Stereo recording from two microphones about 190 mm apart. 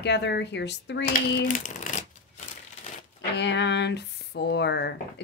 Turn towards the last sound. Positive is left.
turn(degrees=60)  # may be behind; listen again after turning